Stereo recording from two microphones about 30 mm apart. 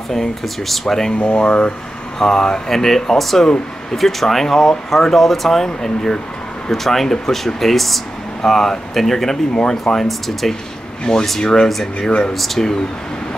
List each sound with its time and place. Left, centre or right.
0.7 s speech: centre
1.1 s speech: left
2.1 s speech: centre
5.7 s speech: left
6.7 s speech: centre
9.5 s speech: left
9.9 s speech: centre
11.1 s speech: left
11.7 s speech: centre